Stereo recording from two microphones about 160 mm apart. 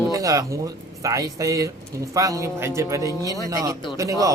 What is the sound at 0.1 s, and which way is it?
Music, 20° right (ahead or behind).